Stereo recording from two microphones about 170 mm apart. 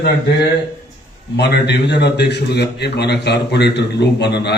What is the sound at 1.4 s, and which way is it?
A man's voice, 80° left.